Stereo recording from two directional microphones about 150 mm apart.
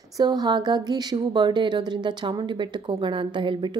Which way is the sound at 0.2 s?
30° right (ahead or behind).